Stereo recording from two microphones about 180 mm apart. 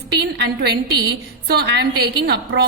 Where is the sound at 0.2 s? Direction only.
65° right (ahead or behind).